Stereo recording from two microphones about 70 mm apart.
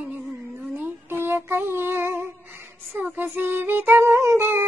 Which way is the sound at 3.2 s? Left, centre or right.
Right.